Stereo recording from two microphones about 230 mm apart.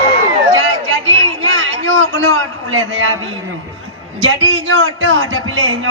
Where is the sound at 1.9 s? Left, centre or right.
Right.